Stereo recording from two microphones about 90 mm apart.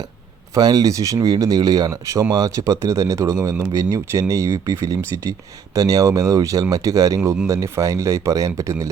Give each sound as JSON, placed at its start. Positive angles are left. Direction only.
{"t": 0.5, "sound": "speech", "side_deg": -45}